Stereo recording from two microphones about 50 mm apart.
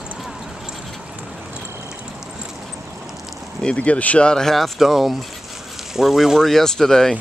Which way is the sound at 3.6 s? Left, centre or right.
Left.